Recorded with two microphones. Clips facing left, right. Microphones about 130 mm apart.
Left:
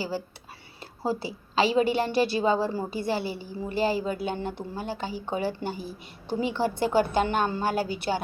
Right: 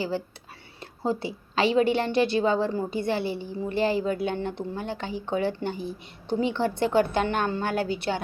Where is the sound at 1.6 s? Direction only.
5° left (ahead or behind).